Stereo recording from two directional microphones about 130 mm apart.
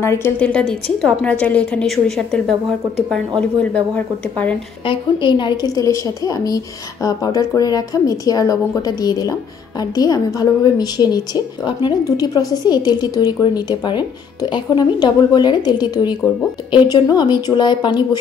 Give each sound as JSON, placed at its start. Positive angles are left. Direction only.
{"t": 0.0, "sound": "a woman's voice", "side_deg": 20}
{"t": 0.5, "sound": "a woman's voice", "side_deg": 5}
{"t": 4.8, "sound": "a woman's voice", "side_deg": 40}